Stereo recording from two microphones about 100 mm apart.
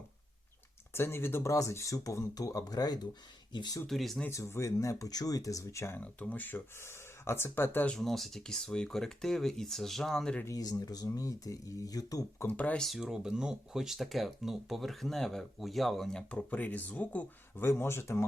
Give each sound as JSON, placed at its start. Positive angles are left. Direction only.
{"t": 0.9, "sound": "speech", "side_deg": 25}
{"t": 3.8, "sound": "speech", "side_deg": 0}
{"t": 4.3, "sound": "speech", "side_deg": 30}
{"t": 6.0, "sound": "speech", "side_deg": 15}
{"t": 7.9, "sound": "speech", "side_deg": 5}
{"t": 10.4, "sound": "speech", "side_deg": 40}
{"t": 12.5, "sound": "speech", "side_deg": 15}
{"t": 12.8, "sound": "speech", "side_deg": 0}